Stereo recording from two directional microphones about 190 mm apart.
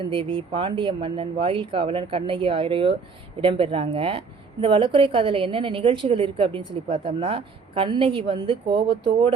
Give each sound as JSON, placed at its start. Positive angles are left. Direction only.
{"t": 0.1, "sound": "a woman's voice", "side_deg": -25}